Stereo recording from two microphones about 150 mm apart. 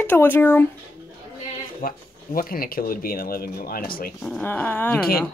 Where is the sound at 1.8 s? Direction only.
70° left (ahead or behind).